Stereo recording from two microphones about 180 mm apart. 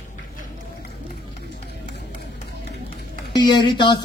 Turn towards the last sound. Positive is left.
turn(degrees=25)  # may be behind; listen again after turning